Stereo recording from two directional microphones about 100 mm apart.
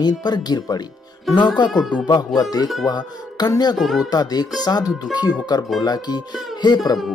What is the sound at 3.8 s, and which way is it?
Speech, centre (ahead or behind).